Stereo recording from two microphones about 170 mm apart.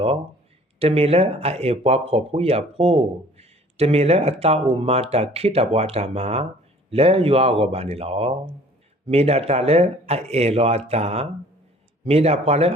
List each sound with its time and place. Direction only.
0.8 s speech: 35° right (ahead or behind)